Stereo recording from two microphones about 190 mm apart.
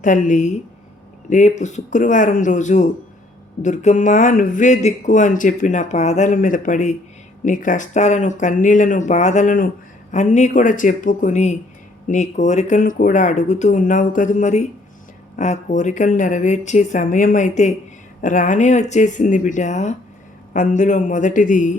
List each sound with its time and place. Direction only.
0.0 s speech: 40° left (ahead or behind)